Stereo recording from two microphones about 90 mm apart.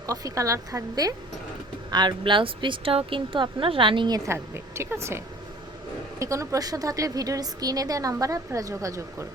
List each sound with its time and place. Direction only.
0.1 s a woman's voice: 40° right (ahead or behind)
1.9 s a woman's voice: 55° right (ahead or behind)
4.3 s a woman's voice: 30° right (ahead or behind)